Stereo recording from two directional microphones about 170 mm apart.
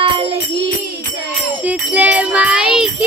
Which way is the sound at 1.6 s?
10° right (ahead or behind).